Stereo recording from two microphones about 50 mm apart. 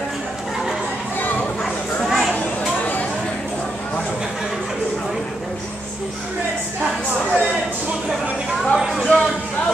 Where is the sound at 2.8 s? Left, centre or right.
Left.